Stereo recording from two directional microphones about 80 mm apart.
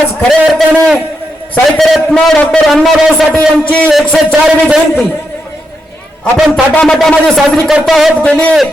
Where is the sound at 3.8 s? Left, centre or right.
Centre.